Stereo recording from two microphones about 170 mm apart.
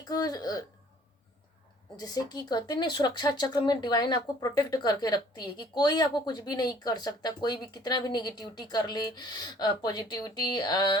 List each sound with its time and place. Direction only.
0.1 s speech: 20° left (ahead or behind)
2.0 s speech: 20° left (ahead or behind)